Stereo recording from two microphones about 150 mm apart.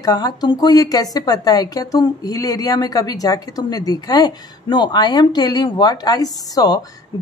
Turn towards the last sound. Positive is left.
turn(degrees=25)  # may be behind; listen again after turning